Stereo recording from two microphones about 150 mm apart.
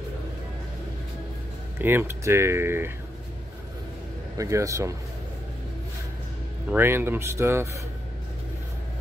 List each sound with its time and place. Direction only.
1.8 s speech: 15° right (ahead or behind)
4.4 s a man's voice: 20° right (ahead or behind)
6.7 s speech: 15° right (ahead or behind)